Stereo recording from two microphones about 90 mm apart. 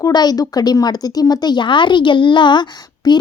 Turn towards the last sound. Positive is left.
turn(degrees=50)  # may be behind; listen again after turning